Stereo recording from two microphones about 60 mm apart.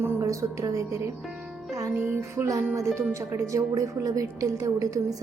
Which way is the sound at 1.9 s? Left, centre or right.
Right.